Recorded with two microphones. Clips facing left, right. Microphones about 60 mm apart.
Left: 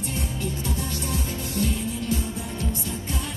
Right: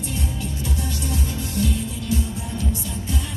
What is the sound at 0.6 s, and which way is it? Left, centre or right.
Music, left.